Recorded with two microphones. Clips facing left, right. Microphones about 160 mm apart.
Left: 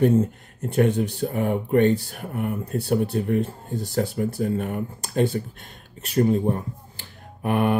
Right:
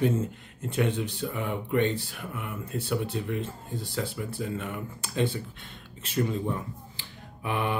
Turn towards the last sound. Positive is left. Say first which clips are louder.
# left 8 dB
turn(degrees=50)  # may be behind; listen again after turning